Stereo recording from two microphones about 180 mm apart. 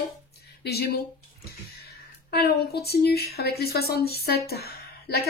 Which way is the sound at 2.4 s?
60° left (ahead or behind).